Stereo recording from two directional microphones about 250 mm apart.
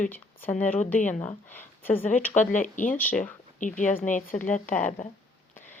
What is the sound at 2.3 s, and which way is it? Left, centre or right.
Speech, left.